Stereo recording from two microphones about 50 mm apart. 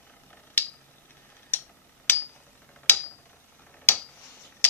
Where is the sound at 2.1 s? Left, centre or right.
Left.